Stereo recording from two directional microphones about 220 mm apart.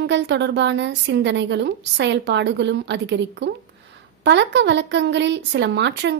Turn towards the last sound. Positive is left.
turn(degrees=-55)  # may be behind; listen again after turning